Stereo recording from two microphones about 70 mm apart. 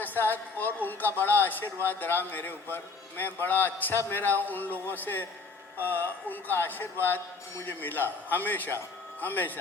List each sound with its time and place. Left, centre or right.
0.0 s a man's voice: left